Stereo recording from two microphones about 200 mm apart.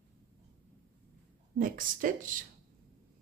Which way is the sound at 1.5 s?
45° right (ahead or behind).